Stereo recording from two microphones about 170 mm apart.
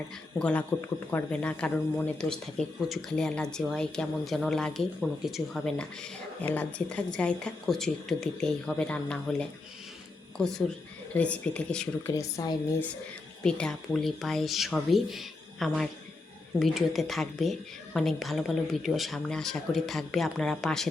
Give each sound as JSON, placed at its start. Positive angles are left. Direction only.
{"t": 0.3, "sound": "speech", "side_deg": 5}
{"t": 12.1, "sound": "speech", "side_deg": 20}
{"t": 13.4, "sound": "speech", "side_deg": 5}